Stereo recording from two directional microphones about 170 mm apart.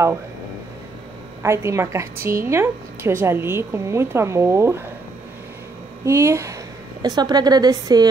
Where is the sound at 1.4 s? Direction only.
15° right (ahead or behind).